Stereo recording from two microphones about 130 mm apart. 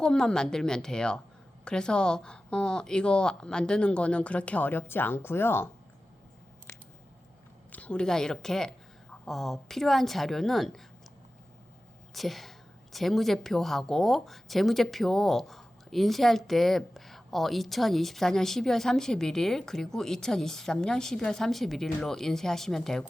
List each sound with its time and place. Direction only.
0.0 s a woman's voice: 5° left (ahead or behind)
7.7 s a woman's voice: 10° left (ahead or behind)
12.1 s a woman's voice: centre (ahead or behind)